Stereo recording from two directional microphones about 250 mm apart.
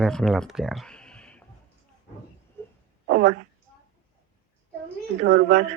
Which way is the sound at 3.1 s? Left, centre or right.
Right.